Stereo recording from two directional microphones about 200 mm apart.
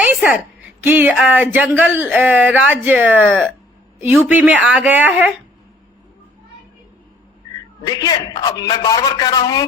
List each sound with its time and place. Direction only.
0.0 s a sound: 5° right (ahead or behind)
0.8 s speech: 10° right (ahead or behind)
3.2 s speech: 5° left (ahead or behind)
4.0 s speech: 10° right (ahead or behind)
7.9 s a man's voice: 20° left (ahead or behind)